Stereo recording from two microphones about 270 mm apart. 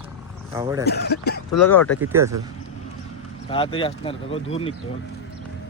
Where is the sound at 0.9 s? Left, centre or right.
Left.